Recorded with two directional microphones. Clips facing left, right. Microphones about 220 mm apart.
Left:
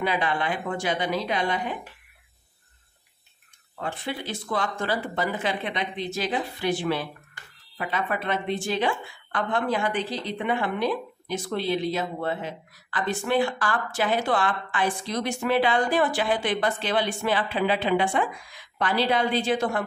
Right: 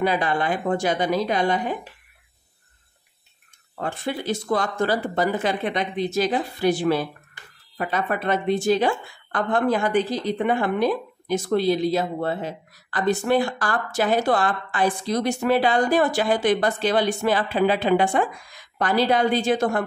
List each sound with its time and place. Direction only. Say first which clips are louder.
0.0 s a woman's voice: right 4 dB; 40° right (ahead or behind)
3.7 s a woman's voice: right 4 dB; 45° right (ahead or behind)